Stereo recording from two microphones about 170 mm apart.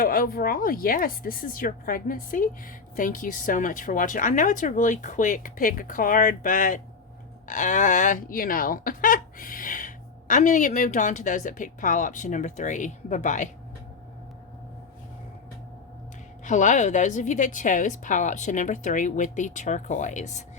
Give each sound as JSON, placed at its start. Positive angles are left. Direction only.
{"t": 0.0, "sound": "speech", "side_deg": 55}
{"t": 16.4, "sound": "speech", "side_deg": 45}